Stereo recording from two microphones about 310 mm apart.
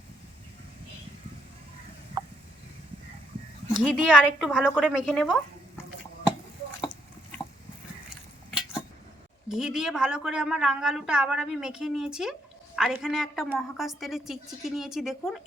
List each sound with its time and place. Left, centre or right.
3.9 s a woman's voice: centre
8.4 s a sound: centre
9.5 s a woman's voice: centre